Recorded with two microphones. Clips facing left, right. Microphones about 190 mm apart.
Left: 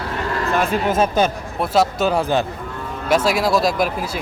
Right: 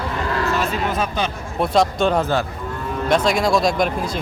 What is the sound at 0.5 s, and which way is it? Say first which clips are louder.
Speech: left 3 dB; 55° left (ahead or behind).